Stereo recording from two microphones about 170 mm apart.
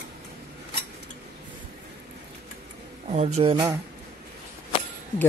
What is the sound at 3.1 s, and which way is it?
Speech, 40° right (ahead or behind).